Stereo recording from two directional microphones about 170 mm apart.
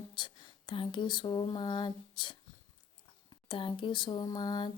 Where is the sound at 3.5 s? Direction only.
30° left (ahead or behind).